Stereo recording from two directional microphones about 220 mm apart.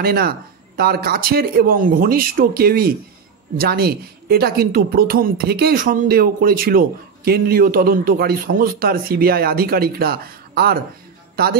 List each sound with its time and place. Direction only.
0.0 s speech: 45° right (ahead or behind)